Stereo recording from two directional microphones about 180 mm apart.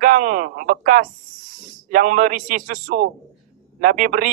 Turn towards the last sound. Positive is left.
turn(degrees=-50)  # may be behind; listen again after turning